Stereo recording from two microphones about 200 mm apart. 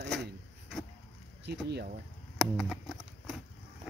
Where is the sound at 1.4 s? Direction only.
55° right (ahead or behind).